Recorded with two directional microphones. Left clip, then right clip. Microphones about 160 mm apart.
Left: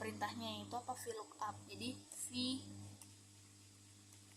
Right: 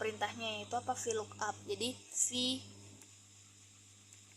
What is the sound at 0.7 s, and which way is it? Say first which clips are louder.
A woman's voice: right 11 dB; 40° right (ahead or behind).